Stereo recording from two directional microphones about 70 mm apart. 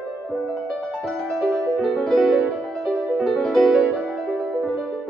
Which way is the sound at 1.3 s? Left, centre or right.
Centre.